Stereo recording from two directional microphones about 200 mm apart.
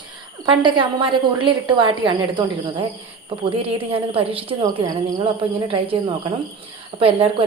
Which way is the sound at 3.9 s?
30° right (ahead or behind).